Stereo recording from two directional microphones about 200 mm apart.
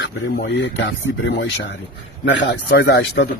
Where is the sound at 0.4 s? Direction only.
60° left (ahead or behind).